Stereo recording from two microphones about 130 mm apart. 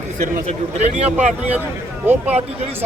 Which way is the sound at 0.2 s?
75° right (ahead or behind).